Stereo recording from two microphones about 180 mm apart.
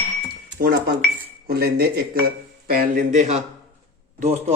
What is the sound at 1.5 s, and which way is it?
Speech, 60° right (ahead or behind).